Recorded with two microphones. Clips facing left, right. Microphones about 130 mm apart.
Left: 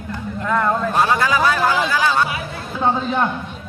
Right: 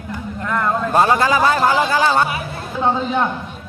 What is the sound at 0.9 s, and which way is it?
A man's voice, 30° right (ahead or behind).